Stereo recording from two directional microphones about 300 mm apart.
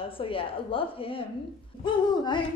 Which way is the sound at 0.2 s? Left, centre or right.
Centre.